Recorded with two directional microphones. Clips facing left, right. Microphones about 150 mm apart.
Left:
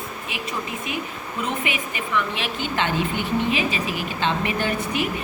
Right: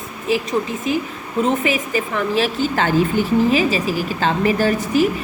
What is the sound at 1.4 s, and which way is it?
Speech, 35° right (ahead or behind).